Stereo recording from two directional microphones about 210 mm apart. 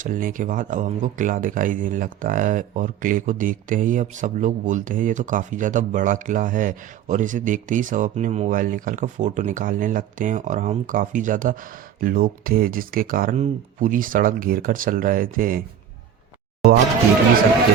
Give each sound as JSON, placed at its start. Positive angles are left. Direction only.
{"t": 0.0, "sound": "speech", "side_deg": -40}